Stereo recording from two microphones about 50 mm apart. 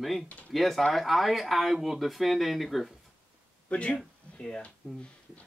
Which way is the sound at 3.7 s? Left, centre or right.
Left.